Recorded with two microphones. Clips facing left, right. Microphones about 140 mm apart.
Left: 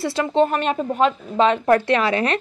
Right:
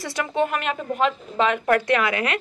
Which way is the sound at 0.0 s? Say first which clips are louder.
Left 5 dB; 25° left (ahead or behind).